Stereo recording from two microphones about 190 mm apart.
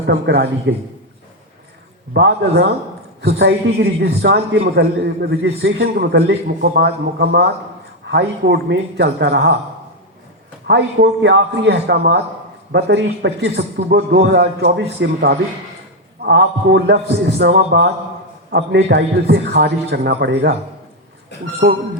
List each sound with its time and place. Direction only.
0.1 s a man's voice: 70° right (ahead or behind)
2.1 s a man's voice: 65° right (ahead or behind)
10.7 s a man's voice: 65° right (ahead or behind)